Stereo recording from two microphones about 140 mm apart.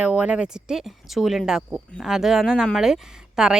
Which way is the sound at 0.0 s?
10° right (ahead or behind).